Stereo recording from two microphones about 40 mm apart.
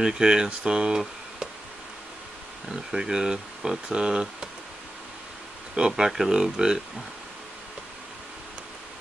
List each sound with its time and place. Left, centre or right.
0.0 s speech: centre
2.7 s speech: centre
5.8 s speech: centre